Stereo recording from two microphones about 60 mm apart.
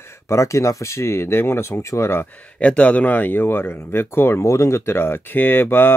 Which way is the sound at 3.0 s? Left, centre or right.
Left.